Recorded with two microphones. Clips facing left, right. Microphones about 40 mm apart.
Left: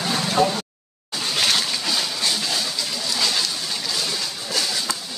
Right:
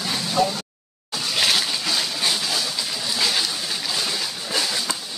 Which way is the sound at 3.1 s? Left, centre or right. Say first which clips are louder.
Right 1 dB; centre.